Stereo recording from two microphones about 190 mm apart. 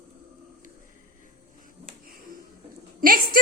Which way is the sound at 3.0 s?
50° right (ahead or behind).